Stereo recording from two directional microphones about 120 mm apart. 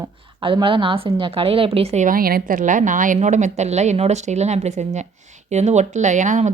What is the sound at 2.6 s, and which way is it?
A woman's voice, 90° right.